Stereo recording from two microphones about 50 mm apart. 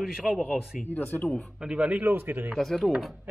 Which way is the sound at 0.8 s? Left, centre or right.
Left.